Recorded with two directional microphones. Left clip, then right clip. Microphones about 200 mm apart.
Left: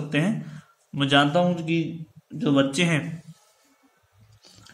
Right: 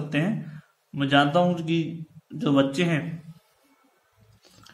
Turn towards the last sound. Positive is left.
turn(degrees=20)  # may be behind; listen again after turning